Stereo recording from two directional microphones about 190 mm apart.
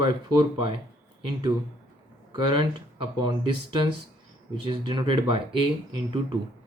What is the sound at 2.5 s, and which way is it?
Speech, 25° right (ahead or behind).